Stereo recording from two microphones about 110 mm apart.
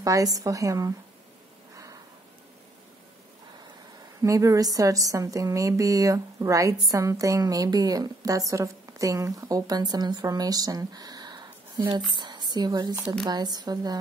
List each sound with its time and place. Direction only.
0.0 s a woman's voice: 30° right (ahead or behind)
4.2 s a woman's voice: 30° right (ahead or behind)